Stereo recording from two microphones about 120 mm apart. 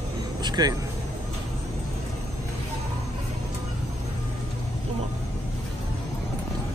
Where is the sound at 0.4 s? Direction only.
35° right (ahead or behind).